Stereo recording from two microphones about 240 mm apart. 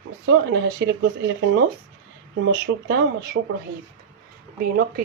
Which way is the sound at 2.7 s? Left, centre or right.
Right.